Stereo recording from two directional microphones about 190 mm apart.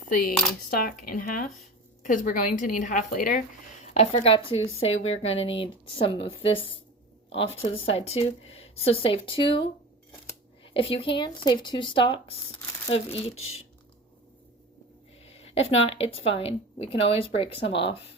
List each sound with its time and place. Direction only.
0.7 s a woman's voice: 50° left (ahead or behind)
3.8 s speech: 35° left (ahead or behind)
7.6 s speech: 30° left (ahead or behind)
15.3 s speech: 30° left (ahead or behind)